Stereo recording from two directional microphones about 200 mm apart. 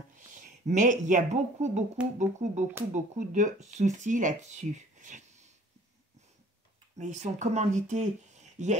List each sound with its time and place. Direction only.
0.1 s a woman's voice: 40° right (ahead or behind)
7.0 s speech: 35° right (ahead or behind)